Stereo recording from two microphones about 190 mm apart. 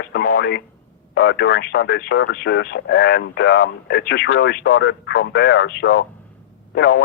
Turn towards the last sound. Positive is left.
turn(degrees=60)  # may be behind; listen again after turning